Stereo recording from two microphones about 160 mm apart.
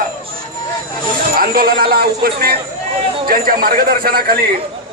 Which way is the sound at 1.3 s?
65° right (ahead or behind).